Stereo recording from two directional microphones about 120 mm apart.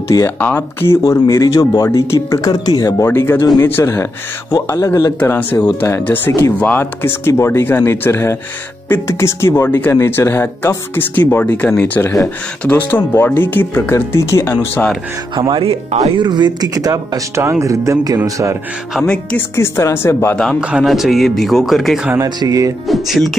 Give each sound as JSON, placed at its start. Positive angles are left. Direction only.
{"t": 0.4, "sound": "speech", "side_deg": 15}
{"t": 3.1, "sound": "speech", "side_deg": 20}
{"t": 5.2, "sound": "speech", "side_deg": 15}
{"t": 12.0, "sound": "speech", "side_deg": 25}
{"t": 12.6, "sound": "speech", "side_deg": 15}
{"t": 15.3, "sound": "speech", "side_deg": -45}
{"t": 16.0, "sound": "speech", "side_deg": -40}
{"t": 19.3, "sound": "speech", "side_deg": 20}
{"t": 20.7, "sound": "speech", "side_deg": 0}
{"t": 22.2, "sound": "speech", "side_deg": -30}
{"t": 22.8, "sound": "speech", "side_deg": 0}